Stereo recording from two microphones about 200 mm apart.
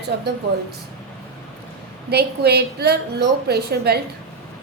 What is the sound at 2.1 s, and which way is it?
A woman's voice, 55° right (ahead or behind).